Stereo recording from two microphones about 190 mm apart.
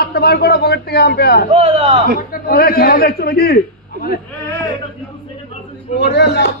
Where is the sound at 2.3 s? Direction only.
55° left (ahead or behind).